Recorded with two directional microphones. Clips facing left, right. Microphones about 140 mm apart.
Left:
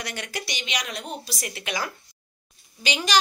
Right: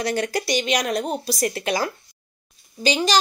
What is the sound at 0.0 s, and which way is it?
Speech, 35° right (ahead or behind).